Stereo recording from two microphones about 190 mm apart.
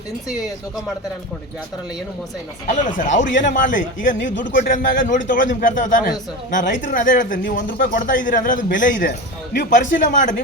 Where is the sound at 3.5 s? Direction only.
45° left (ahead or behind).